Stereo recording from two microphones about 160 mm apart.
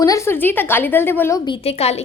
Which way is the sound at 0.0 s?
20° left (ahead or behind).